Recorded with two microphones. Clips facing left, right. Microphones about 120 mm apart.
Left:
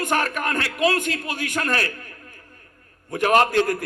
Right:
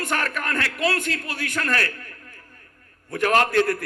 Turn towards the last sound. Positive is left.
turn(degrees=20)  # may be behind; listen again after turning